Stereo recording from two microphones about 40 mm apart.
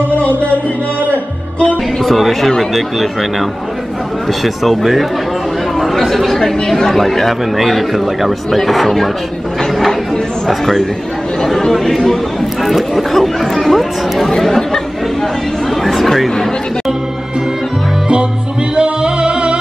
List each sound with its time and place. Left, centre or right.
2.0 s speech: centre
4.6 s speech: centre
10.5 s speech: centre
12.6 s chatter: centre
15.8 s a sound: centre
18.8 s music: right